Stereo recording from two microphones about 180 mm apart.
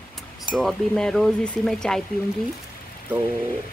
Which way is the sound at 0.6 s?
Centre (ahead or behind).